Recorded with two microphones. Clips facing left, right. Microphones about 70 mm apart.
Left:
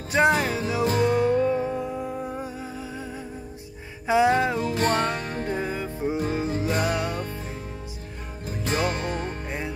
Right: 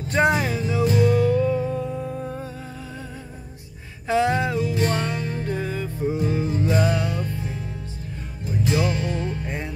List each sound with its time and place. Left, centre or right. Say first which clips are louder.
0.1 s music: even; centre
0.8 s music: right 2 dB; left
1.8 s music: right 1 dB; centre
4.1 s music: left 1 dB; centre
4.6 s music: even; left
5.4 s music: right 1 dB; left
8.6 s music: right 2 dB; left
9.5 s music: right 1 dB; centre